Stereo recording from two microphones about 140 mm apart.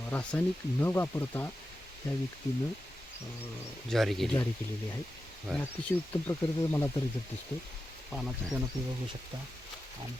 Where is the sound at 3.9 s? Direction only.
Centre (ahead or behind).